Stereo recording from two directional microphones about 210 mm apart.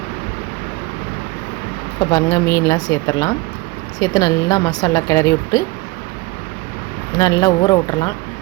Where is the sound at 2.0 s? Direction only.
15° left (ahead or behind).